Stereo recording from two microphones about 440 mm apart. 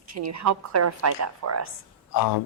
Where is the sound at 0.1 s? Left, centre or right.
Right.